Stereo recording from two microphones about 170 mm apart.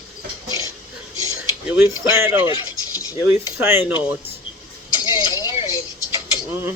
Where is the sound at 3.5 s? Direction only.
15° right (ahead or behind).